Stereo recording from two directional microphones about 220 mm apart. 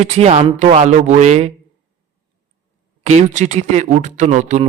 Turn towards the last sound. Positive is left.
turn(degrees=-35)  # may be behind; listen again after turning